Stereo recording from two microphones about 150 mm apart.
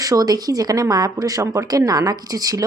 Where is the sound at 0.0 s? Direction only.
25° right (ahead or behind).